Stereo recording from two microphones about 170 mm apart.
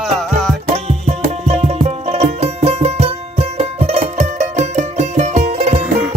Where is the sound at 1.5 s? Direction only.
40° right (ahead or behind).